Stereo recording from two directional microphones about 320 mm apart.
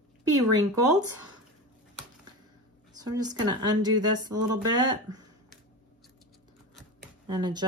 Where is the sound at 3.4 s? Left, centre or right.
Centre.